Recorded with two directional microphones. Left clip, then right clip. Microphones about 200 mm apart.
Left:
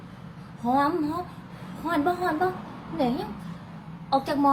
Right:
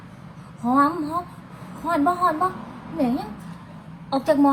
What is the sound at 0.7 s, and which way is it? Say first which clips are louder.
Speech: right 4 dB; centre (ahead or behind).